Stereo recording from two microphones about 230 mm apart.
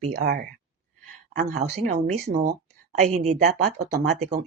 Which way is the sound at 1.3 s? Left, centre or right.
Right.